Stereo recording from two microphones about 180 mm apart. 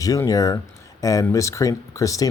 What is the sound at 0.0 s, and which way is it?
Speech, 20° left (ahead or behind).